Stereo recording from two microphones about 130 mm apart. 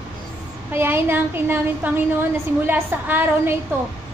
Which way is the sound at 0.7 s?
15° right (ahead or behind).